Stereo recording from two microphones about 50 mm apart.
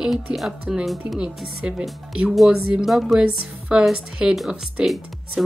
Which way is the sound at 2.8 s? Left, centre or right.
Centre.